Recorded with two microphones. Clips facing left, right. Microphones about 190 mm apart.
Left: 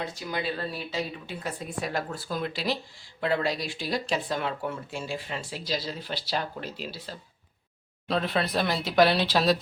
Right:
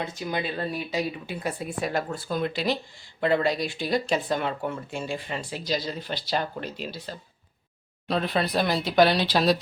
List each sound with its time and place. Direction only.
0.0 s speech: 20° right (ahead or behind)
1.8 s speech: centre (ahead or behind)